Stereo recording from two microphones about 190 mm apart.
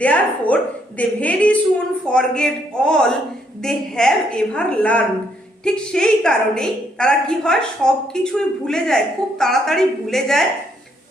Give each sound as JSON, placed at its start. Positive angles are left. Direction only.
{"t": 0.0, "sound": "a woman's voice", "side_deg": 5}